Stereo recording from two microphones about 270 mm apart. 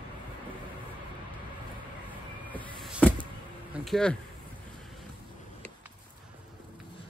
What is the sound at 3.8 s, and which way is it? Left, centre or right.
Speech, centre.